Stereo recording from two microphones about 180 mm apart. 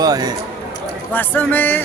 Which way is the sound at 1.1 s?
10° left (ahead or behind).